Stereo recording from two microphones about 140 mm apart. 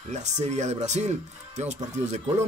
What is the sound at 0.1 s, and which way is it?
A man's voice, 55° right (ahead or behind).